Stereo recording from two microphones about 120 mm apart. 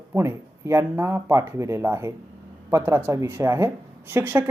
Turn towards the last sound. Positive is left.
turn(degrees=-20)  # may be behind; listen again after turning